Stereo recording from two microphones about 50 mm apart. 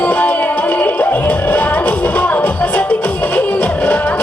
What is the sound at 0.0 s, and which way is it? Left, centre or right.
Music, left.